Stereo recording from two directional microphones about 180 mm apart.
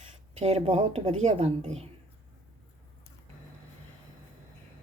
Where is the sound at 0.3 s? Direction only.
35° right (ahead or behind).